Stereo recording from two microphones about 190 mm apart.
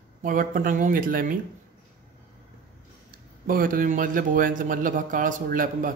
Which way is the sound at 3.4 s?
50° right (ahead or behind).